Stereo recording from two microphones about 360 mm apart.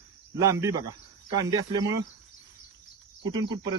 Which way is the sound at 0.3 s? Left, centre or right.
Centre.